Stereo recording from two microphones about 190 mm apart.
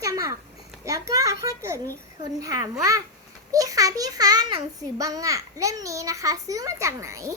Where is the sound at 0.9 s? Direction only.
20° right (ahead or behind).